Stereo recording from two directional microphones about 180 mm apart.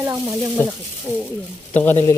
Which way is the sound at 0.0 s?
15° right (ahead or behind).